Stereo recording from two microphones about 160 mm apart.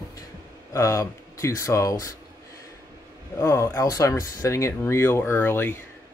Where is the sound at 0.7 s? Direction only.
20° left (ahead or behind).